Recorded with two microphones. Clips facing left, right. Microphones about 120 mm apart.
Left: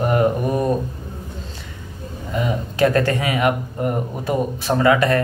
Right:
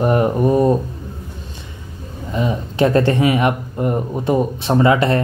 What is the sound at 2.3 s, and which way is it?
Speech, 25° right (ahead or behind).